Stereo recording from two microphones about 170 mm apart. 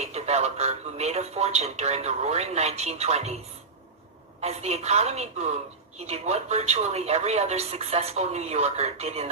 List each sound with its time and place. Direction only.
0.0 s speech: 40° right (ahead or behind)
4.4 s speech: 40° right (ahead or behind)